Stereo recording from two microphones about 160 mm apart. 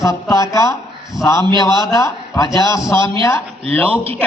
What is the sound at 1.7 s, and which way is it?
A man's voice, 20° left (ahead or behind).